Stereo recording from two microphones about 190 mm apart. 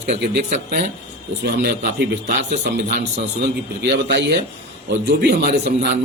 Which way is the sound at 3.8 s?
65° right (ahead or behind).